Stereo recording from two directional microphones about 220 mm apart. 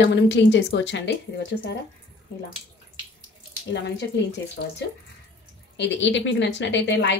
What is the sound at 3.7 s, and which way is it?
Speech, 50° left (ahead or behind).